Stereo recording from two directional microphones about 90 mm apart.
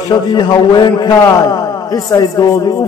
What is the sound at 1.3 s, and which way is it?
A man's voice, 40° left (ahead or behind).